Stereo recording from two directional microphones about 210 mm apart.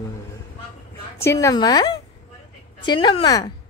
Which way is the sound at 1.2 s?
15° left (ahead or behind).